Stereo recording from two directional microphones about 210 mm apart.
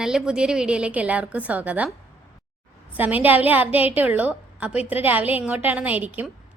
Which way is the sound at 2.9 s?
10° right (ahead or behind).